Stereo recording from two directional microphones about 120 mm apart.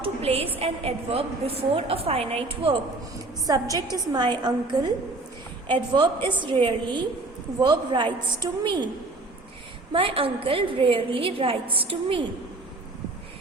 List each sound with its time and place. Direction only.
0.0 s a sound: 55° right (ahead or behind)
0.6 s a woman's voice: 55° right (ahead or behind)
3.4 s a woman's voice: 30° right (ahead or behind)
9.9 s a woman's voice: 50° right (ahead or behind)